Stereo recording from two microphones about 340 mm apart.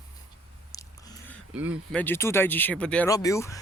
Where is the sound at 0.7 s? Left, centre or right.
Centre.